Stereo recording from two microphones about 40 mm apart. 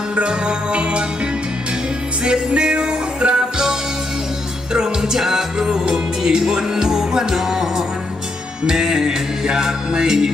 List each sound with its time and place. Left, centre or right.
0.2 s music: right
4.7 s music: centre